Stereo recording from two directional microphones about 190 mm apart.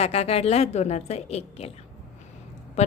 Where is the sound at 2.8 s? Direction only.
35° left (ahead or behind).